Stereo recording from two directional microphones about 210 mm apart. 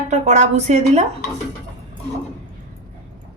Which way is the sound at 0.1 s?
35° right (ahead or behind).